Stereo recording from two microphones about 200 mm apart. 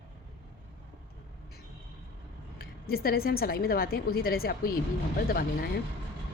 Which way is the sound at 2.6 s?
50° left (ahead or behind).